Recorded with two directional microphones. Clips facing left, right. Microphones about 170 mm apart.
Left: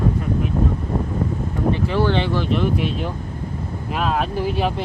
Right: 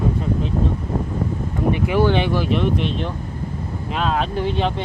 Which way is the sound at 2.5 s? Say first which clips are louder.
Even; 5° left (ahead or behind).